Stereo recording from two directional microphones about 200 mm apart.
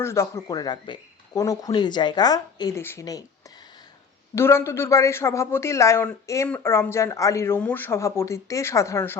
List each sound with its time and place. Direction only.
0.0 s speech: 15° left (ahead or behind)
4.4 s speech: 15° left (ahead or behind)